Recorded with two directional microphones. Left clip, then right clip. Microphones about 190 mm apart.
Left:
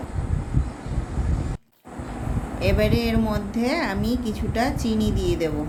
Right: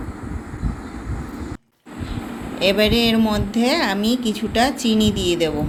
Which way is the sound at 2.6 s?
5° right (ahead or behind).